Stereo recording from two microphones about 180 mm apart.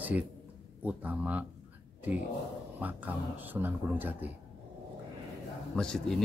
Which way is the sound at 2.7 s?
10° right (ahead or behind).